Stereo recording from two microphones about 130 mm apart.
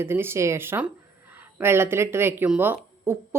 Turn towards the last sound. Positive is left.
turn(degrees=-15)  # may be behind; listen again after turning